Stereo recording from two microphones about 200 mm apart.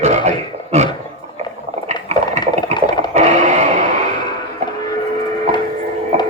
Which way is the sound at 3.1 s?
35° right (ahead or behind).